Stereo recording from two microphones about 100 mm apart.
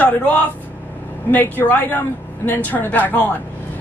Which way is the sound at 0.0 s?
15° left (ahead or behind).